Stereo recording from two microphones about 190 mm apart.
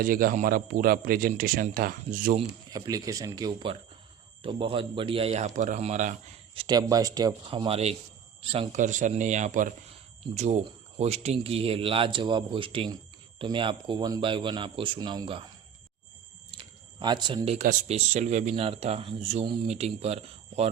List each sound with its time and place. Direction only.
0.0 s a man's voice: 50° right (ahead or behind)
2.6 s speech: 20° right (ahead or behind); by 6.1 s 40° right (ahead or behind)
6.5 s speech: 25° right (ahead or behind)
8.7 s speech: 40° right (ahead or behind); by 15.4 s 25° right (ahead or behind)
17.0 s speech: 25° right (ahead or behind)
17.6 s speech: 40° right (ahead or behind)